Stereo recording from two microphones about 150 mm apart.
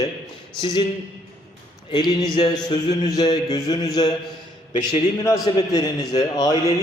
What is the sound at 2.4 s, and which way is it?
A man's voice, 35° left (ahead or behind).